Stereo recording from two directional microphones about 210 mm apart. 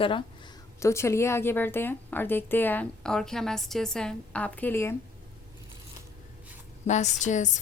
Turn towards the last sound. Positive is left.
turn(degrees=35)  # may be behind; listen again after turning